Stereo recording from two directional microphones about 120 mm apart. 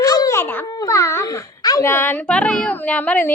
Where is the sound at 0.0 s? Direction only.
30° left (ahead or behind).